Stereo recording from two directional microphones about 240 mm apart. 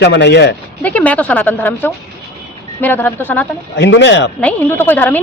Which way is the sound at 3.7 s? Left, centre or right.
Left.